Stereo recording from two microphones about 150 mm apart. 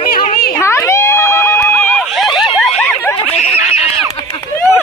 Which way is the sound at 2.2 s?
Centre (ahead or behind).